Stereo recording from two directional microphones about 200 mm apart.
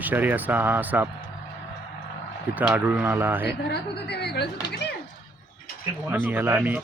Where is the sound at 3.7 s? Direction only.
55° left (ahead or behind).